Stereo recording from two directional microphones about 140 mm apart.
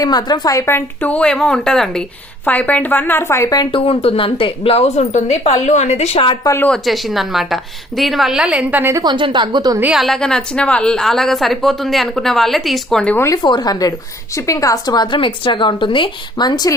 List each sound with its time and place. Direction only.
0.0 s a woman's voice: 30° left (ahead or behind)
3.7 s a woman's voice: 40° left (ahead or behind)
6.4 s a woman's voice: 20° left (ahead or behind)
6.7 s a woman's voice: centre (ahead or behind); by 9.0 s 15° right (ahead or behind)
9.0 s a woman's voice: 35° right (ahead or behind)
9.8 s a woman's voice: centre (ahead or behind)
13.1 s a woman's voice: 20° left (ahead or behind)
13.4 s a woman's voice: 30° left (ahead or behind)